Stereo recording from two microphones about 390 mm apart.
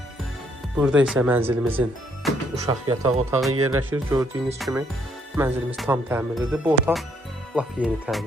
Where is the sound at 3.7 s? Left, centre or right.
Centre.